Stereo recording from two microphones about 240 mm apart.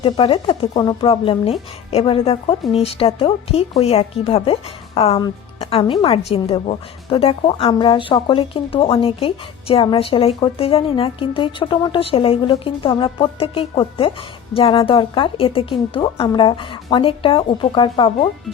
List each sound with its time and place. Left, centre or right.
0.0 s a woman's voice: left